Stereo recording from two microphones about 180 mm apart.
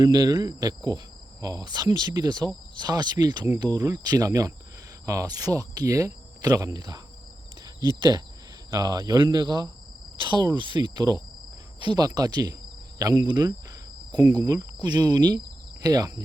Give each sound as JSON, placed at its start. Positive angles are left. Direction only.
{"t": 0.0, "sound": "cricket", "side_deg": -20}